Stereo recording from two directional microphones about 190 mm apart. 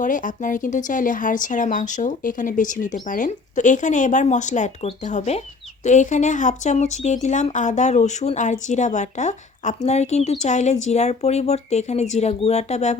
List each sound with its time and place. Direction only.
0.0 s speech: 45° left (ahead or behind)